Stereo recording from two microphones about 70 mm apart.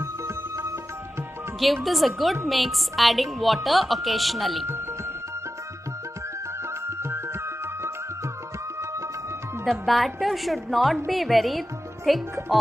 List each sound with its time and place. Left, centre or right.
1.6 s a woman's voice: centre
6.9 s music: right
9.7 s a woman's voice: centre